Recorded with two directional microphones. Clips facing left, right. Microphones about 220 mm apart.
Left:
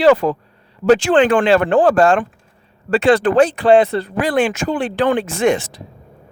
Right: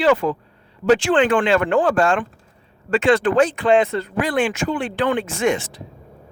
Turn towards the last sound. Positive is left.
turn(degrees=35)  # may be behind; listen again after turning